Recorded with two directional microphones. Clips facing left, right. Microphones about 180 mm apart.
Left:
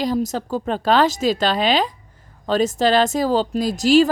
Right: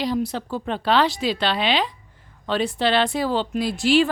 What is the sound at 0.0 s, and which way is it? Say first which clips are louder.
A woman's voice: left 3 dB; 45° left (ahead or behind).